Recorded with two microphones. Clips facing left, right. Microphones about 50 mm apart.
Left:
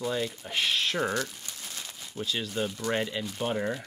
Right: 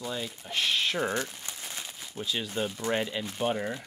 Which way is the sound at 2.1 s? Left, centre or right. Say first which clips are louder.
Left 1 dB; centre.